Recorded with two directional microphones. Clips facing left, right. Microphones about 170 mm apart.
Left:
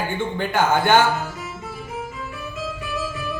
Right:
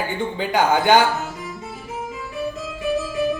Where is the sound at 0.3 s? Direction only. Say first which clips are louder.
Right 1 dB; 15° right (ahead or behind).